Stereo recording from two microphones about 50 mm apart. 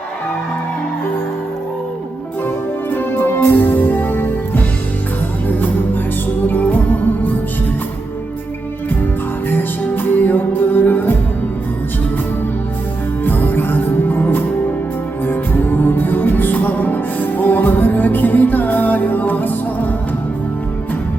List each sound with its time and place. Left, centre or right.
2.9 s music: left
9.9 s music: left
13.2 s music: left